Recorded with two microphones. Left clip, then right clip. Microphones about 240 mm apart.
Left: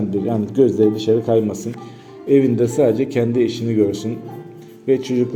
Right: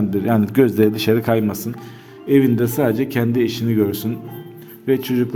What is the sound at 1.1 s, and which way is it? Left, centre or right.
Speech, right.